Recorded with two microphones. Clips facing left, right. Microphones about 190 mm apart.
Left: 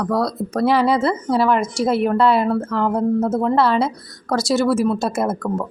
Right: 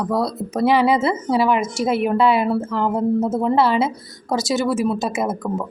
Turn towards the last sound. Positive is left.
turn(degrees=-15)  # may be behind; listen again after turning